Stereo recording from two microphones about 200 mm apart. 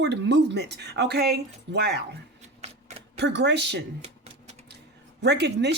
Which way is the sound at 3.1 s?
60° right (ahead or behind).